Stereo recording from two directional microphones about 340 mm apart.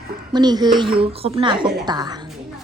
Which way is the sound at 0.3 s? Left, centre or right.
Centre.